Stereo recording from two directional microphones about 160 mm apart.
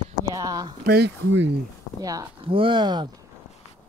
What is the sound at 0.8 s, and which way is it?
Speech, 75° right (ahead or behind).